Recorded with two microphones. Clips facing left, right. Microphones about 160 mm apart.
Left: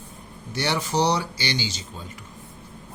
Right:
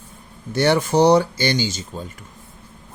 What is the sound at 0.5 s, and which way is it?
Speech, 50° right (ahead or behind).